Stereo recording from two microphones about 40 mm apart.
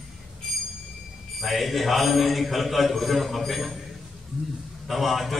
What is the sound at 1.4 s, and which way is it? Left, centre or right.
A man's voice, centre.